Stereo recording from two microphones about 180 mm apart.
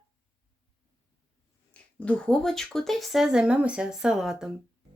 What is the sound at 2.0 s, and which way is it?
Speech, 5° left (ahead or behind).